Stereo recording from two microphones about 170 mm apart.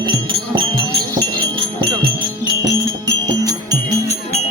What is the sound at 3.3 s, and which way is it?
Music, 20° right (ahead or behind).